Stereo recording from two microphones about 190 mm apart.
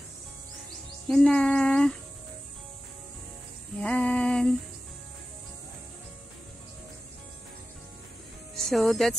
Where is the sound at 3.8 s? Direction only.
5° left (ahead or behind).